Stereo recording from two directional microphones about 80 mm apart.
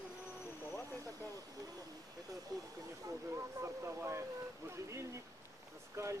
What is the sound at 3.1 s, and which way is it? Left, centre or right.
Speech, right.